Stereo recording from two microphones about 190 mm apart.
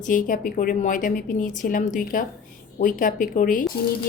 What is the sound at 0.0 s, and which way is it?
A woman's voice, 45° left (ahead or behind).